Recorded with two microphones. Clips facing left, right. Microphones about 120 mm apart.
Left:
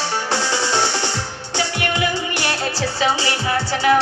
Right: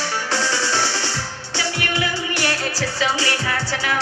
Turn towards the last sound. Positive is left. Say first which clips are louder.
# left 7 dB
turn(degrees=20)  # may be behind; listen again after turning